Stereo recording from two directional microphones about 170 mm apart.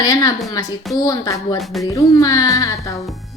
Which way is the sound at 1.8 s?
20° left (ahead or behind).